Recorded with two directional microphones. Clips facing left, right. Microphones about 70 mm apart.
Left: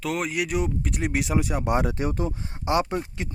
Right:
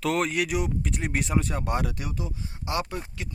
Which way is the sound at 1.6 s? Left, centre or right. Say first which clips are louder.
Left 5 dB; left.